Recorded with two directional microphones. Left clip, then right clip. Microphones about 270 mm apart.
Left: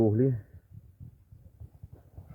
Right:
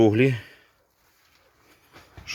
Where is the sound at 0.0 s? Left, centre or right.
Right.